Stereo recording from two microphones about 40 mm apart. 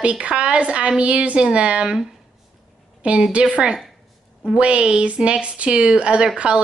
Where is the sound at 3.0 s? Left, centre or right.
Right.